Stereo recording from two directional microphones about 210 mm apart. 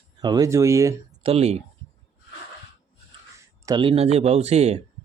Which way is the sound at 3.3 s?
15° right (ahead or behind).